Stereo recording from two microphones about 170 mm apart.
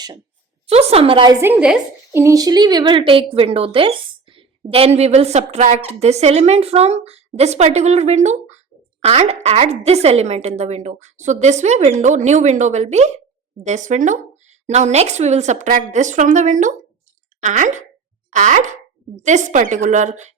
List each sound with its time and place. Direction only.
0.7 s speech: 35° right (ahead or behind)
1.4 s a woman's voice: 10° right (ahead or behind)
2.1 s speech: 20° right (ahead or behind); by 20.3 s 45° right (ahead or behind)